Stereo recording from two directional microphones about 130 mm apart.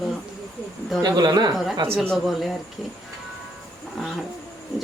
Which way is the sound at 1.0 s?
30° right (ahead or behind).